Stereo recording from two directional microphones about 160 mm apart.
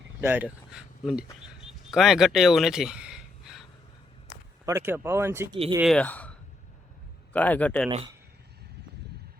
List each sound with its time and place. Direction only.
0.2 s speech: 10° right (ahead or behind)
1.6 s a sound: centre (ahead or behind)
4.6 s speech: 15° right (ahead or behind)
5.8 s speech: 5° left (ahead or behind)
7.3 s speech: 10° left (ahead or behind)
7.9 s speech: 35° right (ahead or behind)